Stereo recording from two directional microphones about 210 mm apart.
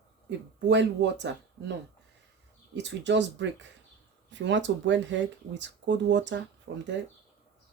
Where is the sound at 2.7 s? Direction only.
55° right (ahead or behind).